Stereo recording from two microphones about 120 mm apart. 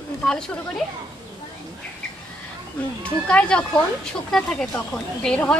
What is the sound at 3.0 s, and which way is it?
Speech, 10° left (ahead or behind).